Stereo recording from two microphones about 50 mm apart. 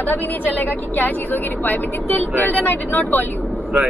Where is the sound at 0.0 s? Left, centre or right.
Left.